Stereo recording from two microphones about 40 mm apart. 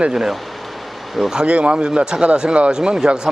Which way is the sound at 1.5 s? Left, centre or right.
Right.